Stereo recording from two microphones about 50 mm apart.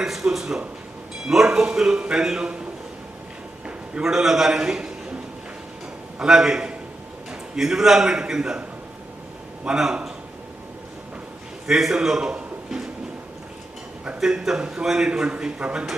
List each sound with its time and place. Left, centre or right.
0.0 s a sound: centre
1.3 s a man's voice: centre
4.0 s a man's voice: centre
4.6 s a man's voice: centre
6.1 s a man's voice: centre
9.6 s a man's voice: centre
11.6 s a man's voice: centre
14.2 s a man's voice: centre; by 15.9 s right